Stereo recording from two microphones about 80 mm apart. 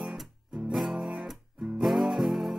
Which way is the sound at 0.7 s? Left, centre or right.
Centre.